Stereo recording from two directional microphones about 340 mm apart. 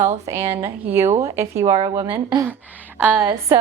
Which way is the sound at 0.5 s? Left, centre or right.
Centre.